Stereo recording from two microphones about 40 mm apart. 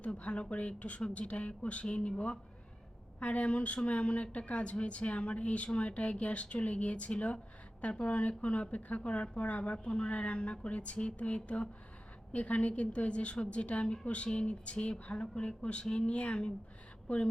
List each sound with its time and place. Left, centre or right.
0.2 s speech: left
9.7 s speech: left